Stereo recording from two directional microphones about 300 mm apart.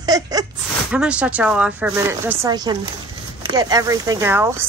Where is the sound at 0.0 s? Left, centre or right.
Centre.